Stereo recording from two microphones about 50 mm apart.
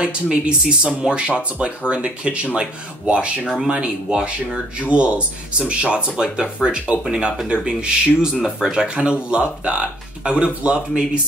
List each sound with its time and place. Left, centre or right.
0.0 s speech: right
3.4 s speech: centre